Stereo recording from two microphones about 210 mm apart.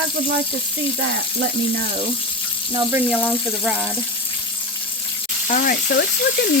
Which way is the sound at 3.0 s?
5° left (ahead or behind).